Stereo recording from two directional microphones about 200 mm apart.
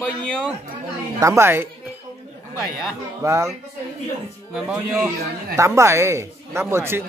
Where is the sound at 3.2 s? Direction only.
15° right (ahead or behind).